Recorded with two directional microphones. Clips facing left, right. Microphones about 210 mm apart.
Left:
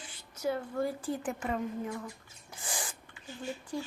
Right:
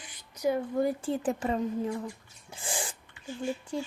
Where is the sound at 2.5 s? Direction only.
25° right (ahead or behind).